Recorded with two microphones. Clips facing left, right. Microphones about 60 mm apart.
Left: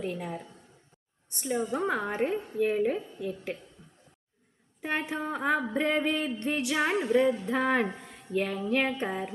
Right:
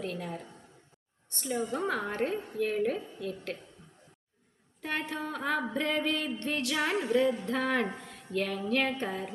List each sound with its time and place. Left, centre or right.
0.0 s a woman's voice: centre
1.3 s music: centre
4.8 s music: centre
8.0 s speech: centre
8.7 s music: centre